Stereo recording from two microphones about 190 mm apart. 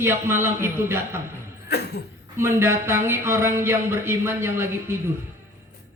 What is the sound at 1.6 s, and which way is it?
Cough, 60° left (ahead or behind).